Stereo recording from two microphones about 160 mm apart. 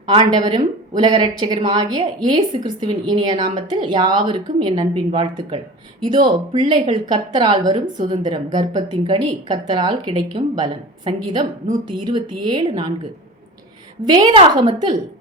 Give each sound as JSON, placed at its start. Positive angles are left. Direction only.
{"t": 0.1, "sound": "a woman's voice", "side_deg": -30}
{"t": 14.0, "sound": "a woman's voice", "side_deg": -25}